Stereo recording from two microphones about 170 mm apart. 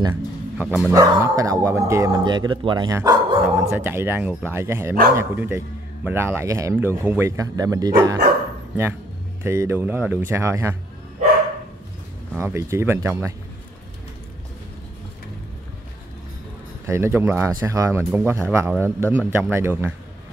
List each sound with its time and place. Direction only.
0.1 s speech: 10° right (ahead or behind); by 3.0 s 25° right (ahead or behind)
3.0 s dog: 25° right (ahead or behind)
3.4 s speech: 15° right (ahead or behind)
9.4 s speech: 15° right (ahead or behind)
12.4 s speech: 15° right (ahead or behind)
16.8 s speech: 15° right (ahead or behind)